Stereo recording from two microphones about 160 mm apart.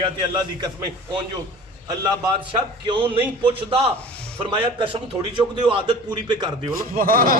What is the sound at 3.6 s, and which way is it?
A man's voice, 35° right (ahead or behind).